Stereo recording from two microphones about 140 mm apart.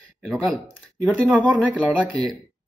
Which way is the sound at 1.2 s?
10° right (ahead or behind).